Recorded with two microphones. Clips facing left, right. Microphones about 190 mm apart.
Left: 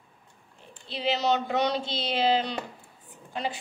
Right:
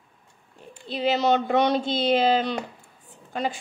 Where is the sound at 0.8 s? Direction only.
50° right (ahead or behind).